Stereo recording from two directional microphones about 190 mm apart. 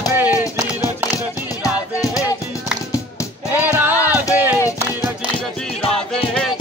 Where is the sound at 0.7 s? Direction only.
20° left (ahead or behind).